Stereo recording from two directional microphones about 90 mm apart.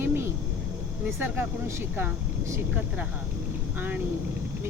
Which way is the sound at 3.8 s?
20° right (ahead or behind).